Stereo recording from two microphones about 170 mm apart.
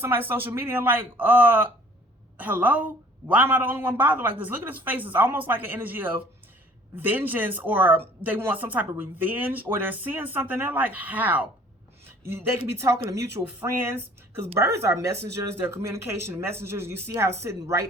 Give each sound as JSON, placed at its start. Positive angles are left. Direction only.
{"t": 0.0, "sound": "speech", "side_deg": -10}
{"t": 14.6, "sound": "speech", "side_deg": -15}